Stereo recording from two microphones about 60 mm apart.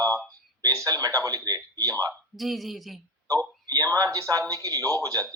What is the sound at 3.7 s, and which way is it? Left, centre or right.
Speech, right.